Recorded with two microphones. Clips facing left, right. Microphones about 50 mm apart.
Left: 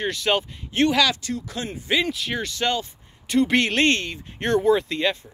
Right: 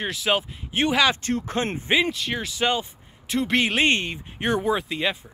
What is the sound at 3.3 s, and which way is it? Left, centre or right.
Speech, centre.